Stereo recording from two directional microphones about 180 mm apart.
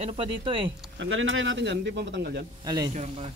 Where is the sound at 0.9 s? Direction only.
90° right; by 2.4 s 75° right (ahead or behind).